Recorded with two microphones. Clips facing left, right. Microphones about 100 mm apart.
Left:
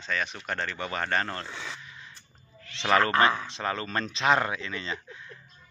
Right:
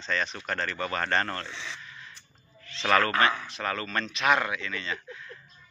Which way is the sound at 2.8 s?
20° left (ahead or behind).